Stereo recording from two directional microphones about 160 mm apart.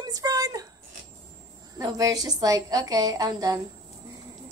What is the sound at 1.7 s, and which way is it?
A woman's voice, 20° right (ahead or behind).